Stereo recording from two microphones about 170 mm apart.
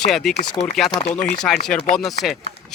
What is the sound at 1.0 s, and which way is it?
Speech, 40° left (ahead or behind).